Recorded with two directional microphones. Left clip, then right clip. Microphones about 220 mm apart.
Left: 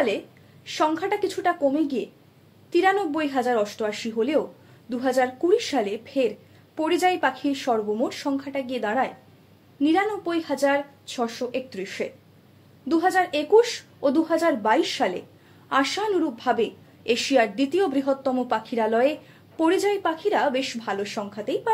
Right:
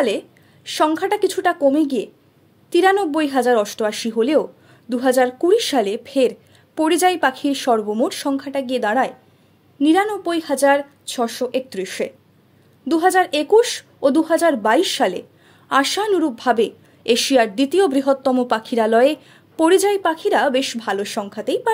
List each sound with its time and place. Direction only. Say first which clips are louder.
0.7 s a woman's voice: right 5 dB; 50° right (ahead or behind)